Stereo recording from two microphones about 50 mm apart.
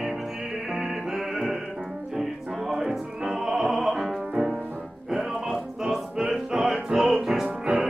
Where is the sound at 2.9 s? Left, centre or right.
Centre.